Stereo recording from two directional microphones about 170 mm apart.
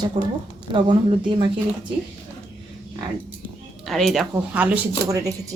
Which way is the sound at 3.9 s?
Centre (ahead or behind).